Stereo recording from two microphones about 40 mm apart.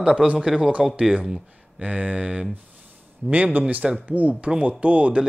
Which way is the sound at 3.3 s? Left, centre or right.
Right.